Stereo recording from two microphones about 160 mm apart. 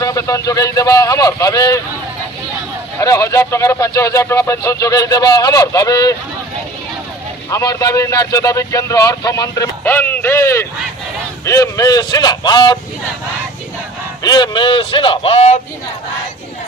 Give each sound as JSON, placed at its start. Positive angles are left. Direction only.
{"t": 0.0, "sound": "speech", "side_deg": 20}
{"t": 3.0, "sound": "speech", "side_deg": 20}
{"t": 7.5, "sound": "speech", "side_deg": 20}
{"t": 14.2, "sound": "a man's voice", "side_deg": 25}